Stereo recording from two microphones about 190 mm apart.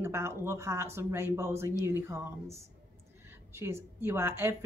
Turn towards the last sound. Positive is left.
turn(degrees=-15)  # may be behind; listen again after turning